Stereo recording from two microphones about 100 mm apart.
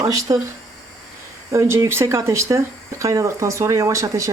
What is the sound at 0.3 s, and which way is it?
Speech, 50° right (ahead or behind).